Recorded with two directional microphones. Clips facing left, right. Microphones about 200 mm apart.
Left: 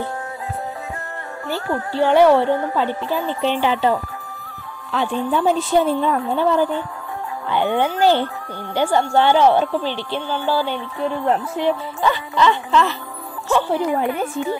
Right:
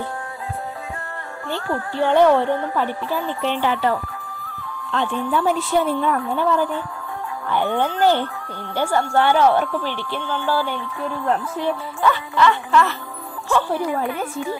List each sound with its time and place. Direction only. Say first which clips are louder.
1.7 s speech: left 2 dB; 20° left (ahead or behind)
2.1 s a woman's voice: left 2 dB; 10° left (ahead or behind)
2.4 s speech: left 2 dB; 20° left (ahead or behind)
5.1 s speech: left 3 dB; 20° left (ahead or behind)
12.0 s music: right 2 dB; 20° left (ahead or behind)
13.5 s speech: left 2 dB; 20° left (ahead or behind)